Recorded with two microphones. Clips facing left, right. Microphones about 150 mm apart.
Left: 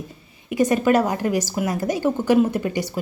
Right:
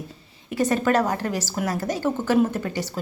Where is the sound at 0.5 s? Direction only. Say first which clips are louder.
Left 3 dB; 15° left (ahead or behind).